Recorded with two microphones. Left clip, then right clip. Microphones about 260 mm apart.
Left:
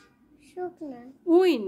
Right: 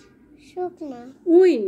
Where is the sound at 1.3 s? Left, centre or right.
Left.